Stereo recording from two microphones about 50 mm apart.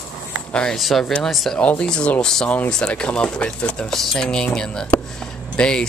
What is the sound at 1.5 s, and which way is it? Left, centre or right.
Speech, left.